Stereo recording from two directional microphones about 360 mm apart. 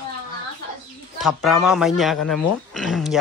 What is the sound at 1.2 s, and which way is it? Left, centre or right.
Speech, centre.